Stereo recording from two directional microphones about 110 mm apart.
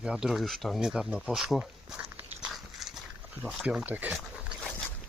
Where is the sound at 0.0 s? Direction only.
5° right (ahead or behind).